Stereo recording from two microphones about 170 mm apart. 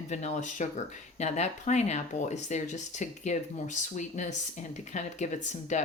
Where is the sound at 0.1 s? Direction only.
40° left (ahead or behind).